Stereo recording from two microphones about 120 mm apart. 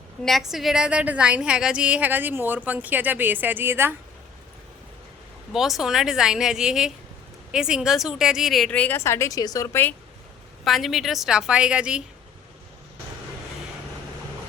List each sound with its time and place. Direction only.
0.3 s a woman's voice: centre (ahead or behind); by 3.9 s 20° right (ahead or behind)
5.5 s speech: 5° right (ahead or behind)
8.7 s a woman's voice: 10° left (ahead or behind)
9.0 s a woman's voice: 25° left (ahead or behind)
10.6 s a woman's voice: centre (ahead or behind)